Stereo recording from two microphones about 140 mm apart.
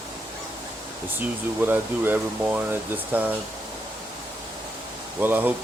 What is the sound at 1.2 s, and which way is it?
Speech, 15° right (ahead or behind).